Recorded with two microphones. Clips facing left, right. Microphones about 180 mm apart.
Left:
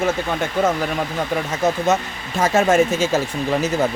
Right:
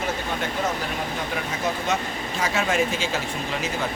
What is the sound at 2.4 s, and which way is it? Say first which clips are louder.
Speech: left 8 dB; 45° left (ahead or behind).